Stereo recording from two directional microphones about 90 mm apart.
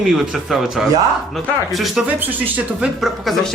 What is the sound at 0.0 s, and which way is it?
Speech, centre (ahead or behind).